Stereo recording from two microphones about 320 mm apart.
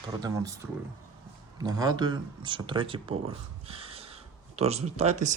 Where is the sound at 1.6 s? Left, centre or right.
Centre.